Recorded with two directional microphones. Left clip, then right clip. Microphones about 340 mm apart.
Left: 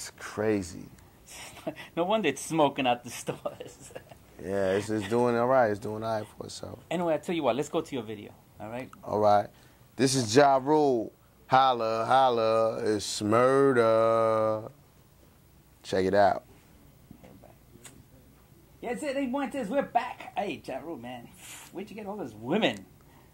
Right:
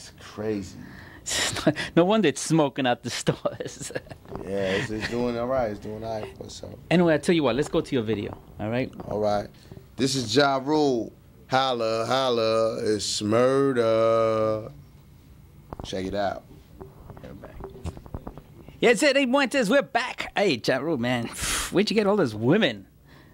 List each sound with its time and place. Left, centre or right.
0.0 s speech: left
1.6 s speech: right
4.5 s speech: left
5.2 s speech: left
6.9 s speech: right
9.1 s a man's voice: left
15.8 s speech: left
16.1 s speech: left
18.8 s speech: right
21.7 s speech: right
22.4 s speech: right